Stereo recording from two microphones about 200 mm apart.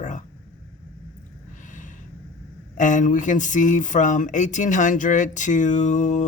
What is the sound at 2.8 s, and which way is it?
Speech, 40° left (ahead or behind).